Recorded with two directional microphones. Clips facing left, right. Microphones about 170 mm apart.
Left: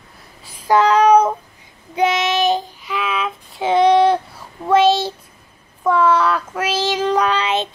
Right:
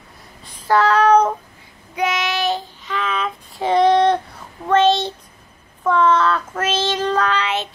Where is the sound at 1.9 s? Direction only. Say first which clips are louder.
Left 4 dB; 25° left (ahead or behind).